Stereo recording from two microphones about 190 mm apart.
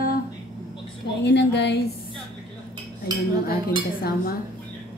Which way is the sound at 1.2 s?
65° left (ahead or behind).